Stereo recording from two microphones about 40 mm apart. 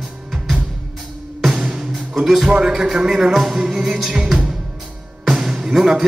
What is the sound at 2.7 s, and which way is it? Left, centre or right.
Music, centre.